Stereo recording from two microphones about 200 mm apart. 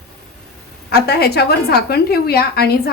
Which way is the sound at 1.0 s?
55° left (ahead or behind).